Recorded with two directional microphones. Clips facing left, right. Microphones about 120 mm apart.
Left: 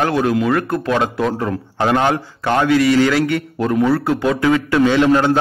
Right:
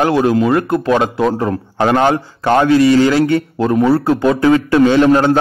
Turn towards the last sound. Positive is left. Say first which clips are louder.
# right 3 dB
turn(degrees=-35)  # may be behind; listen again after turning